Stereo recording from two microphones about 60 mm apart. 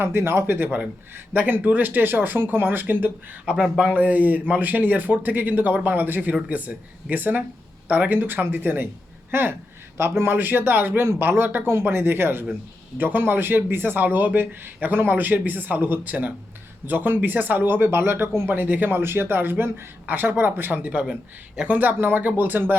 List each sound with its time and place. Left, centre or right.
0.0 s speech: right
1.1 s speech: right
3.4 s speech: centre
3.8 s speech: right
20.8 s speech: right
21.7 s speech: right